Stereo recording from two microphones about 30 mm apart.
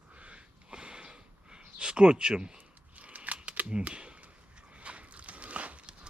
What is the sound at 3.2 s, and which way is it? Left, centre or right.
Camera, right.